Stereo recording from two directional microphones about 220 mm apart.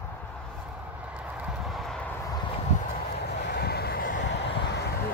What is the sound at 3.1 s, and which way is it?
Vehicle, 50° left (ahead or behind).